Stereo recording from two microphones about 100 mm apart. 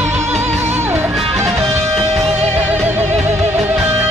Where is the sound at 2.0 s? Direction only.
80° right.